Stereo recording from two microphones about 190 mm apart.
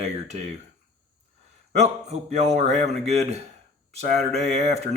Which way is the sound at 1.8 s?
35° right (ahead or behind).